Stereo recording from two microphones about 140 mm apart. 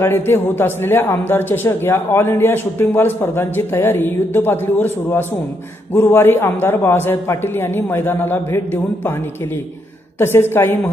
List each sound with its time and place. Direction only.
0.0 s a man's voice: 15° left (ahead or behind)
10.1 s a man's voice: 15° left (ahead or behind)